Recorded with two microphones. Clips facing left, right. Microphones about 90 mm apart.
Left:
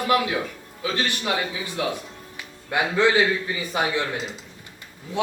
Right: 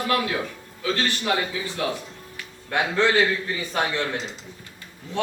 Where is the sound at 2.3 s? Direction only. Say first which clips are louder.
Even; 10° left (ahead or behind).